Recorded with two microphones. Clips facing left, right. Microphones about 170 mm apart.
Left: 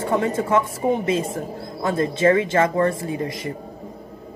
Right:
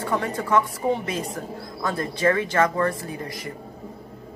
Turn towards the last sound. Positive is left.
turn(degrees=20)  # may be behind; listen again after turning